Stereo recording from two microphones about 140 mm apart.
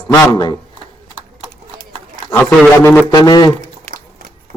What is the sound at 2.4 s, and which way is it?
Speech, 5° left (ahead or behind).